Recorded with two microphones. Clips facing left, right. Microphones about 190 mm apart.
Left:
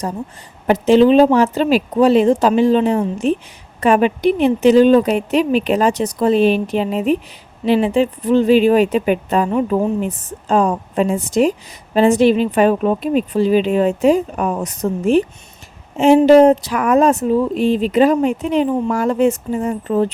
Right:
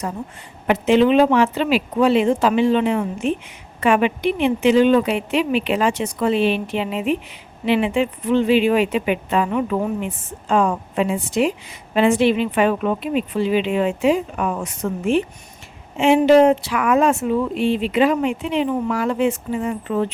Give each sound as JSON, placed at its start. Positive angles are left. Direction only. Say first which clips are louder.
{"t": 0.7, "sound": "speech", "louder": "left 4 dB", "side_deg": 35}